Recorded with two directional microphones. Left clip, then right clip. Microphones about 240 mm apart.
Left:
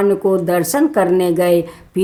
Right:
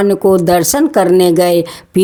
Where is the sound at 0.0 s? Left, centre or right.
Right.